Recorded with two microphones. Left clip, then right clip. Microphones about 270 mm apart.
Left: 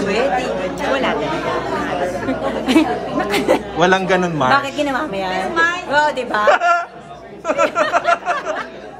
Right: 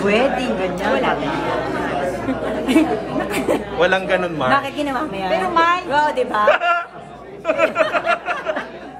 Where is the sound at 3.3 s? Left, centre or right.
Centre.